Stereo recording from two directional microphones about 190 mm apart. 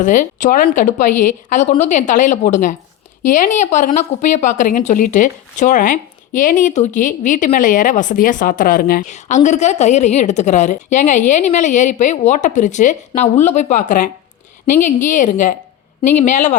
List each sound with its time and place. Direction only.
0.0 s a woman's voice: 40° left (ahead or behind)